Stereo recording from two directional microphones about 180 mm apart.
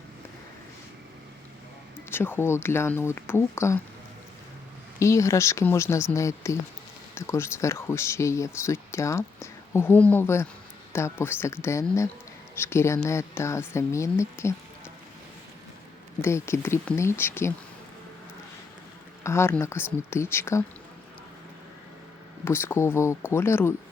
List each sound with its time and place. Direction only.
2.0 s speech: 10° left (ahead or behind)
4.9 s speech: 15° left (ahead or behind)
16.2 s speech: 15° left (ahead or behind)
19.2 s speech: 15° left (ahead or behind)
22.4 s speech: 15° left (ahead or behind)